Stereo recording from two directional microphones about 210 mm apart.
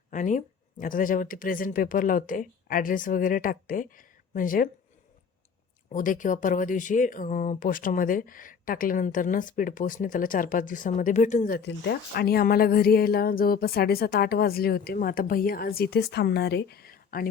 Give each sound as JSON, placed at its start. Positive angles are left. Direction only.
{"t": 0.1, "sound": "speech", "side_deg": 35}
{"t": 5.9, "sound": "speech", "side_deg": 40}